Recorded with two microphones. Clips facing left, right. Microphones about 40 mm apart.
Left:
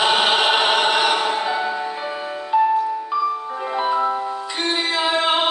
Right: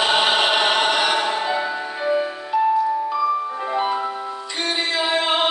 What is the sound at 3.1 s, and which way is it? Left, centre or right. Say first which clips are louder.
Music: right 1 dB; centre.